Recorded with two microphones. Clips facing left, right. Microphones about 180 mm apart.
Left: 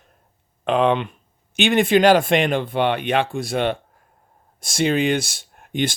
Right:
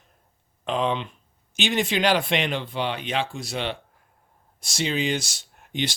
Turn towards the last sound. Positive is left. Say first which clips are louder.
# left 6 dB
turn(degrees=50)  # may be behind; listen again after turning